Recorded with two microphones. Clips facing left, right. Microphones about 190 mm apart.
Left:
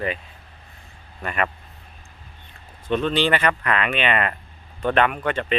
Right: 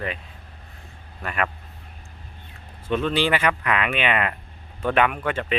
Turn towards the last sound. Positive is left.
turn(degrees=-5)  # may be behind; listen again after turning